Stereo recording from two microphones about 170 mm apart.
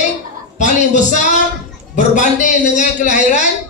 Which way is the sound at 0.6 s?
45° left (ahead or behind).